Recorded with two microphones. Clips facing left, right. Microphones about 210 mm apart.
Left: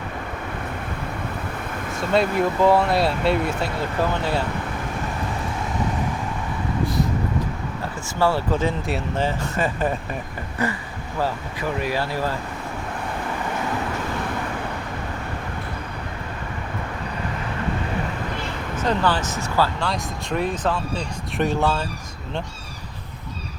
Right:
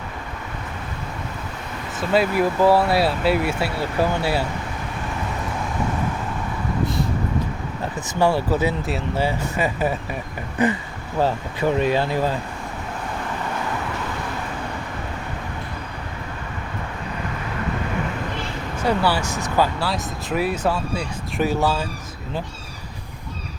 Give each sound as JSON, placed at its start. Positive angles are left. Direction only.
{"t": 2.0, "sound": "speech", "side_deg": -5}
{"t": 8.2, "sound": "speech", "side_deg": -15}
{"t": 18.8, "sound": "speech", "side_deg": -10}